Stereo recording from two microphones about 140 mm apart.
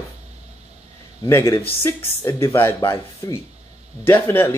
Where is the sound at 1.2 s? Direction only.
20° left (ahead or behind).